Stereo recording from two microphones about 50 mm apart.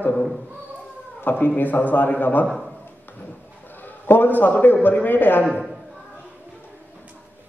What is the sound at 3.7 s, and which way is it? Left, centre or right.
A man's voice, left.